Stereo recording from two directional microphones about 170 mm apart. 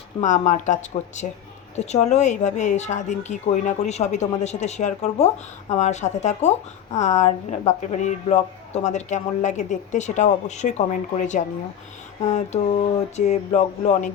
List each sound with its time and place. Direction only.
0.2 s a woman's voice: 45° left (ahead or behind)